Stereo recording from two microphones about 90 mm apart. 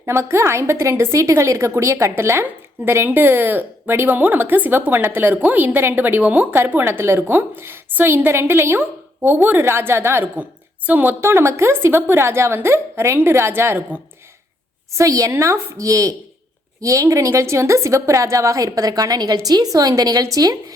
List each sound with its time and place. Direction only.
0.0 s a woman's voice: 30° right (ahead or behind)
14.9 s a woman's voice: 40° right (ahead or behind)